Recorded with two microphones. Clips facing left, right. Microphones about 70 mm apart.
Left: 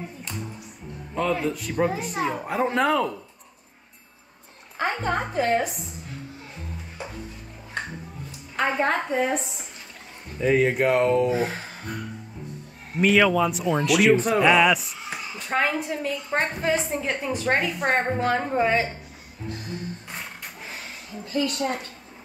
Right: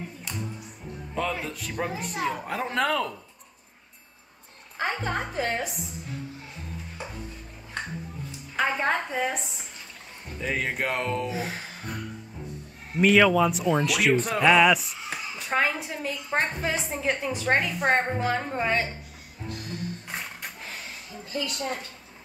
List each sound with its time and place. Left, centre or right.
1.4 s a woman's voice: centre
4.7 s a sound: left
8.5 s a woman's voice: centre
10.4 s a woman's voice: centre
11.2 s speech: left
13.0 s a woman's voice: centre
21.3 s a woman's voice: left